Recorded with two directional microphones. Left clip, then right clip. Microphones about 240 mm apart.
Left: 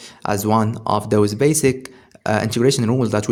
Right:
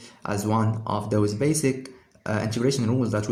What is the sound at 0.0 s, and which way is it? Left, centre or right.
Speech, left.